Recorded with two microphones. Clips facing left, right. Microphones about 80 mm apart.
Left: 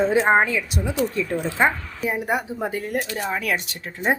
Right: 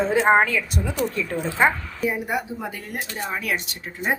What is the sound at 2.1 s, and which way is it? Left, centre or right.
Speech, left.